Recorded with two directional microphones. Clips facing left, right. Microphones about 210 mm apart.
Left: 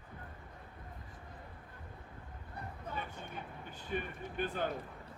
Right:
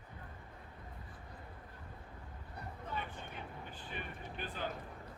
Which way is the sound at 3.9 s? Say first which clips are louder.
Left 9 dB; 50° left (ahead or behind).